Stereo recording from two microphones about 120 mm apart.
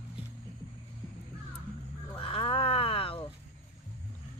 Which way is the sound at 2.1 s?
50° left (ahead or behind).